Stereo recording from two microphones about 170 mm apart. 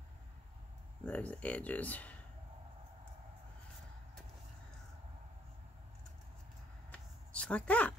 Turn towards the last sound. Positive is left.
turn(degrees=10)  # may be behind; listen again after turning